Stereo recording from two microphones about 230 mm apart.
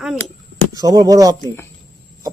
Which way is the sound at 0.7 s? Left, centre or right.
Centre.